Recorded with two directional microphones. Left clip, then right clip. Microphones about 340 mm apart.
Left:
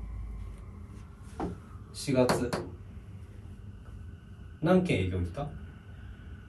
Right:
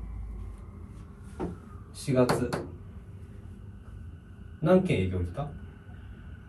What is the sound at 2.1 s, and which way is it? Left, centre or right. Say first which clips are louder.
Speech: right 1 dB; centre.